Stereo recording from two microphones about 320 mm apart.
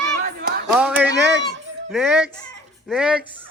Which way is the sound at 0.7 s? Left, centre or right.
Centre.